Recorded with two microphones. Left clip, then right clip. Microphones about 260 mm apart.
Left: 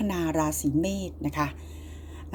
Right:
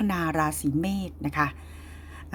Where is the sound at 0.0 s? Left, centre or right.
Right.